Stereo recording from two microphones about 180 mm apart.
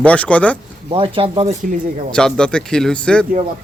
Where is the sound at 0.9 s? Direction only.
30° right (ahead or behind).